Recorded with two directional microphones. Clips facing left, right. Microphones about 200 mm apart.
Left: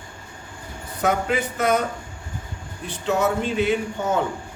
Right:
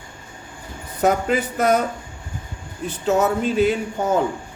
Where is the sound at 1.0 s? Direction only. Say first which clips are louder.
Right 3 dB; 40° right (ahead or behind).